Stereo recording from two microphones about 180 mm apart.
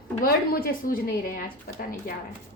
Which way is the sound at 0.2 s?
55° left (ahead or behind).